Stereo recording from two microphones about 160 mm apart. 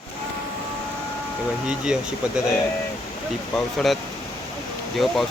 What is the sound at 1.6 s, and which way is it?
Speech, 5° right (ahead or behind).